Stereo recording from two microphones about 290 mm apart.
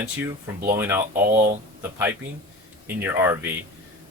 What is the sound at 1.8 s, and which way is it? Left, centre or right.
Speech, centre.